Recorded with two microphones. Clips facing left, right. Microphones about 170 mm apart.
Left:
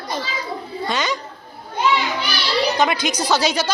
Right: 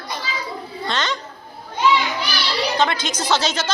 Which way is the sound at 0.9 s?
10° left (ahead or behind).